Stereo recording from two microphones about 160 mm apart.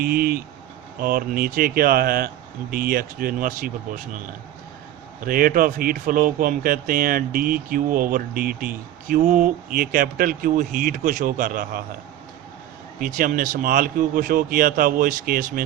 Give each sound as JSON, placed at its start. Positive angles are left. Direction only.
{"t": 0.0, "sound": "speech", "side_deg": -65}
{"t": 5.2, "sound": "speech", "side_deg": -60}
{"t": 13.0, "sound": "speech", "side_deg": -60}